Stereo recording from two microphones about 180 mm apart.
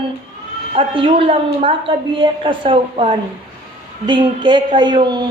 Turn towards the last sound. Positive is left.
turn(degrees=-25)  # may be behind; listen again after turning